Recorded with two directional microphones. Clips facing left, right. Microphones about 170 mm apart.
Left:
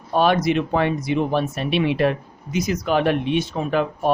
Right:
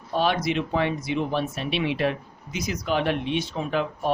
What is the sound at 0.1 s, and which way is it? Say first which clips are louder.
Speech: left 6 dB; 55° left (ahead or behind).